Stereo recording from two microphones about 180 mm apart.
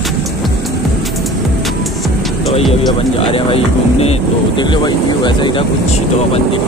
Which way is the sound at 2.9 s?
30° left (ahead or behind).